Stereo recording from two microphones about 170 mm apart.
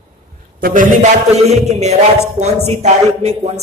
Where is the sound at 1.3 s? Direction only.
40° right (ahead or behind).